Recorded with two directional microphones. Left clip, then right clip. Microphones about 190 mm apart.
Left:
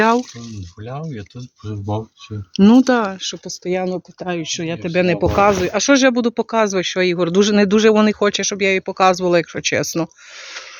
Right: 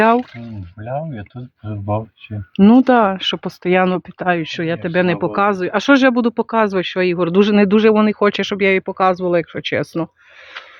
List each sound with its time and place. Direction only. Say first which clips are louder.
0.9 s speech: right 6 dB; 5° right (ahead or behind)
2.6 s speech: right 2 dB; centre (ahead or behind)
3.6 s speech: right 6 dB; 35° right (ahead or behind); by 8.3 s centre (ahead or behind)
8.3 s speech: right 2 dB; 15° right (ahead or behind)
8.9 s speech: left 1 dB; centre (ahead or behind)